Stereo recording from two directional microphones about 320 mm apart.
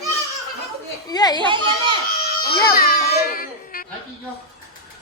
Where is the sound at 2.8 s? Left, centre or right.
Left.